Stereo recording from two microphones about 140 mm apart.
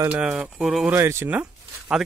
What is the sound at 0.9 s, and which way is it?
Speech, 15° right (ahead or behind).